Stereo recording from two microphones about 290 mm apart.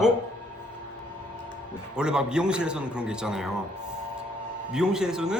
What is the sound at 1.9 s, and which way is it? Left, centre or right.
Speech, centre.